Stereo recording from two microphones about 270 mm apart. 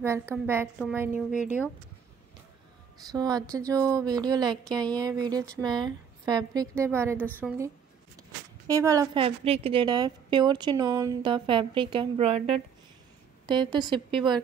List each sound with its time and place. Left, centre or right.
0.0 s a woman's voice: centre
3.0 s a woman's voice: centre
7.2 s a woman's voice: centre
8.6 s a woman's voice: centre